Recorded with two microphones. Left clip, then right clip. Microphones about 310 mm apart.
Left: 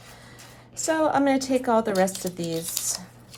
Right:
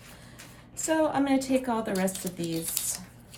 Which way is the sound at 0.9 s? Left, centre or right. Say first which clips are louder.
Left 4 dB; left.